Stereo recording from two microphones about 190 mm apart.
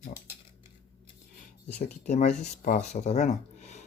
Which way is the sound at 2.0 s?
40° left (ahead or behind).